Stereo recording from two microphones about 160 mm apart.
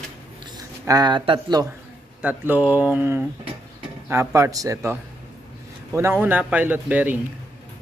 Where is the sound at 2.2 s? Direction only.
10° right (ahead or behind).